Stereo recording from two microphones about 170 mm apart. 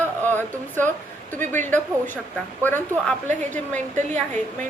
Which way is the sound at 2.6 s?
10° left (ahead or behind).